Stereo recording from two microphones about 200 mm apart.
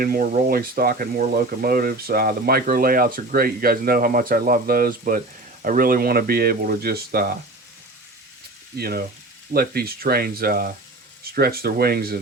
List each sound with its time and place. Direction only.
0.0 s speech: 50° right (ahead or behind)
8.8 s speech: 50° right (ahead or behind)